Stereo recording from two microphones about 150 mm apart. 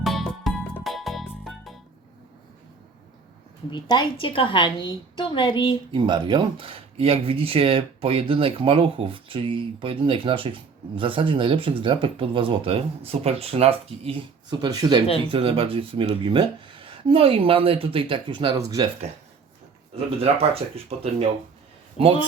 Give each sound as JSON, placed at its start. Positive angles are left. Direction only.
{"t": 0.0, "sound": "music", "side_deg": 0}
{"t": 3.7, "sound": "a woman's voice", "side_deg": 30}
{"t": 5.9, "sound": "speech", "side_deg": -30}
{"t": 15.3, "sound": "speech", "side_deg": -40}
{"t": 20.2, "sound": "speech", "side_deg": -40}